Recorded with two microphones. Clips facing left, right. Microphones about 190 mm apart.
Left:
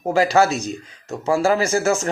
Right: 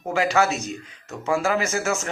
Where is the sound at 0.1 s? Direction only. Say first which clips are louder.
Left 4 dB; 35° left (ahead or behind).